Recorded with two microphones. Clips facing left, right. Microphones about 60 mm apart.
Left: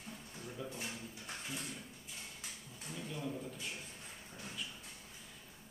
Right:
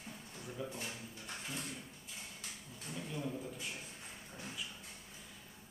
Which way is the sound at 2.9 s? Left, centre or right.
Centre.